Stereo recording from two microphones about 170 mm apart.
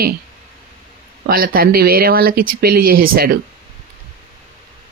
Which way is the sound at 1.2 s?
60° right (ahead or behind).